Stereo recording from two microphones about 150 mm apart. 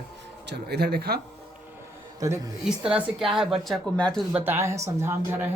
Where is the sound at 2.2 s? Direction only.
20° right (ahead or behind).